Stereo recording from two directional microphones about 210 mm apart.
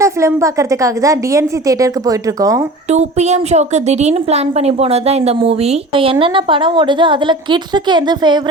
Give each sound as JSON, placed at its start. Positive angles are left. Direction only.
{"t": 0.0, "sound": "a woman's voice", "side_deg": -15}
{"t": 2.9, "sound": "a woman's voice", "side_deg": -30}